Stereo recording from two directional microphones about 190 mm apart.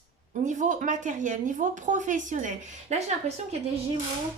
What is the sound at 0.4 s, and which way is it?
Speech, 40° right (ahead or behind).